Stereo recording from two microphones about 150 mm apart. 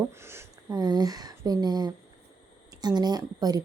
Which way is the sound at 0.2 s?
15° right (ahead or behind).